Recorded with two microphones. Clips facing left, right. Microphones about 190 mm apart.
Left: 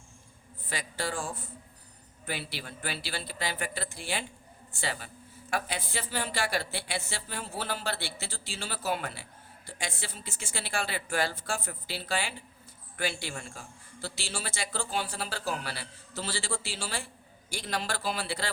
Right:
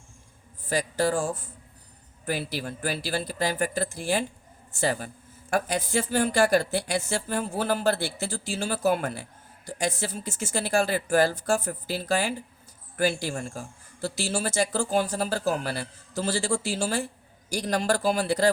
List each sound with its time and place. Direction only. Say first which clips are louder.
0.7 s speech: right 10 dB; 40° right (ahead or behind)
2.2 s a man's voice: right 8 dB; 45° right (ahead or behind)